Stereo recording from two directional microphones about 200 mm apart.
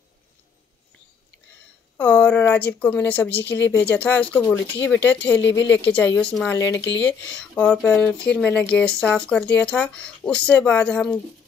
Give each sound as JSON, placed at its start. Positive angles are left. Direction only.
{"t": 2.0, "sound": "a woman's voice", "side_deg": 10}
{"t": 3.5, "sound": "a woman's voice", "side_deg": 65}
{"t": 3.8, "sound": "a woman's voice", "side_deg": 10}
{"t": 5.6, "sound": "a woman's voice", "side_deg": 65}
{"t": 6.3, "sound": "a woman's voice", "side_deg": 10}
{"t": 6.8, "sound": "a woman's voice", "side_deg": 65}
{"t": 7.3, "sound": "a woman's voice", "side_deg": 5}